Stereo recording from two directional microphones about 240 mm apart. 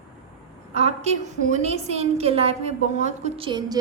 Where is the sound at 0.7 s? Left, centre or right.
Right.